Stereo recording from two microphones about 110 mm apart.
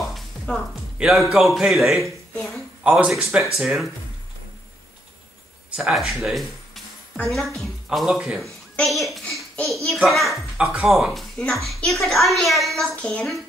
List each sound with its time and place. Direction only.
0.0 s music: centre (ahead or behind)
1.3 s a woman's voice: 5° right (ahead or behind)
5.8 s a child's voice: centre (ahead or behind)